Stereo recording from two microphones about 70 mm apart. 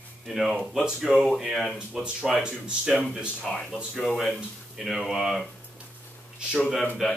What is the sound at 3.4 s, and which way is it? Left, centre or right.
Speech, centre.